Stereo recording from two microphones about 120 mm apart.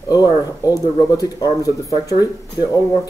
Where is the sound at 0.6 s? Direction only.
30° left (ahead or behind).